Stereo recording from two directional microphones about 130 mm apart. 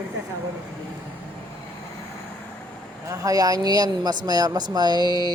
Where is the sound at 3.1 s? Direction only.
25° right (ahead or behind).